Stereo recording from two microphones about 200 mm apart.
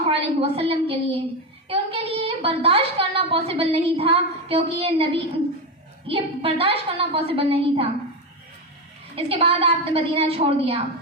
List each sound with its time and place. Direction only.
0.0 s a woman's voice: 30° right (ahead or behind)
9.1 s a woman's voice: 30° right (ahead or behind)